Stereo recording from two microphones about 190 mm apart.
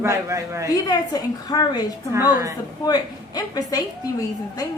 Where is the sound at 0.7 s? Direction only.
20° left (ahead or behind).